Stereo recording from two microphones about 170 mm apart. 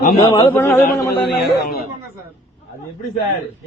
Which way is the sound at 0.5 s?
15° left (ahead or behind).